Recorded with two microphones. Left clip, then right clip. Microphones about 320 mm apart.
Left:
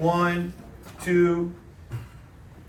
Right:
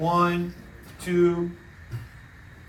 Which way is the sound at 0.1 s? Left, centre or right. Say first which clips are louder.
Right 1 dB; centre.